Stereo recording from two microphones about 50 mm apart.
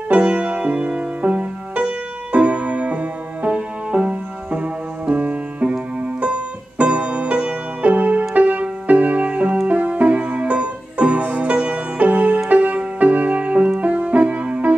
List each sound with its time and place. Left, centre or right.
0.1 s music: right
6.8 s music: right
13.7 s keyboard: right